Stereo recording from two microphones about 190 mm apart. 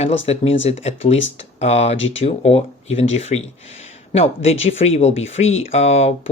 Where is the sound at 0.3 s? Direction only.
35° left (ahead or behind).